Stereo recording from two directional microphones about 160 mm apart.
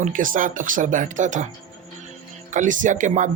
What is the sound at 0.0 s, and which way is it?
Speech, 55° right (ahead or behind).